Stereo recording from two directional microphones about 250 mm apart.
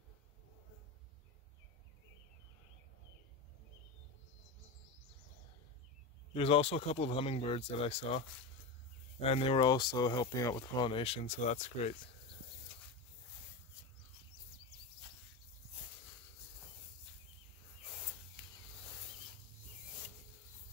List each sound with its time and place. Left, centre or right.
6.3 s speech: left
9.2 s speech: left
18.4 s a sound: centre